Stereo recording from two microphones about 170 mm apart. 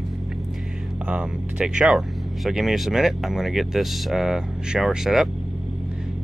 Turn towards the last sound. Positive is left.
turn(degrees=0)  # may be behind; listen again after turning